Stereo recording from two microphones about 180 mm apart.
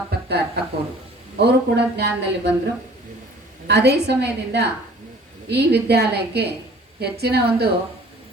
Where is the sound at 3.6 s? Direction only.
70° right (ahead or behind).